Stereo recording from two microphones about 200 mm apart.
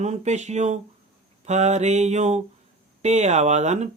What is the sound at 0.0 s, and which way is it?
Speech, 35° right (ahead or behind).